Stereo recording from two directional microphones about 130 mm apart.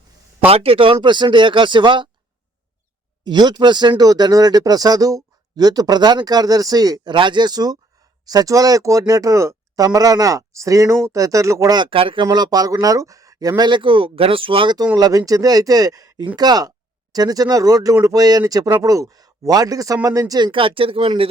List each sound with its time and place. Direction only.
0.4 s speech: 50° right (ahead or behind)
3.2 s speech: 35° right (ahead or behind)
11.8 s speech: 40° right (ahead or behind)
14.9 s speech: 25° right (ahead or behind)
20.5 s speech: 45° right (ahead or behind)